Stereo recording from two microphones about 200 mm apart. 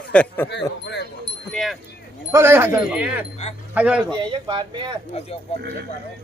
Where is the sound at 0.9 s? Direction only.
60° left (ahead or behind).